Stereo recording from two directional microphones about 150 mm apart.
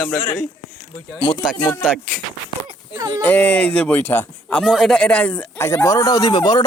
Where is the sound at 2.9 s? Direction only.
25° right (ahead or behind).